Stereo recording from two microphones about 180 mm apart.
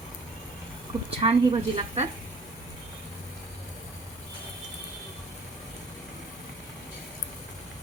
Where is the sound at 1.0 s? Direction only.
30° right (ahead or behind).